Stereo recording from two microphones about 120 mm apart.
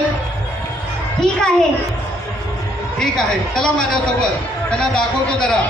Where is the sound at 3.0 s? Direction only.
5° left (ahead or behind).